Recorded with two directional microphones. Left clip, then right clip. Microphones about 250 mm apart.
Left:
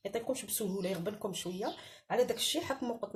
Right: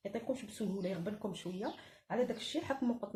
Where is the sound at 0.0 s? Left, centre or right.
Left.